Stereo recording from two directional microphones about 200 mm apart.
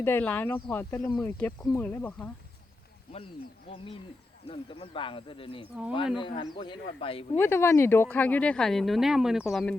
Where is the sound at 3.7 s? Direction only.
30° left (ahead or behind).